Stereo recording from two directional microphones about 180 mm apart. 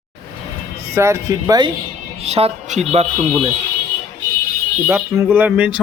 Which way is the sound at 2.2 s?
35° right (ahead or behind).